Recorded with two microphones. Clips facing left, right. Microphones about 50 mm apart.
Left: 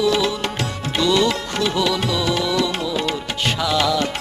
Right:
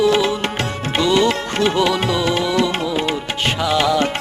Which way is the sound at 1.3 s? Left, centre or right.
Right.